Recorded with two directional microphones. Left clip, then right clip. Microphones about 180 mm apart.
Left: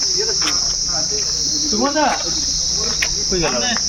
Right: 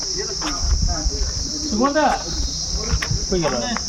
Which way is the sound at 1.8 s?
20° right (ahead or behind).